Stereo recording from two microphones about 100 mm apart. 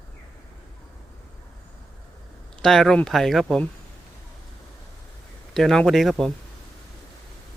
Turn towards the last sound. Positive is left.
turn(degrees=0)  # may be behind; listen again after turning